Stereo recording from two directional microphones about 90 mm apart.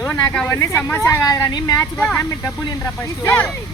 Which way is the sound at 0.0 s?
30° left (ahead or behind).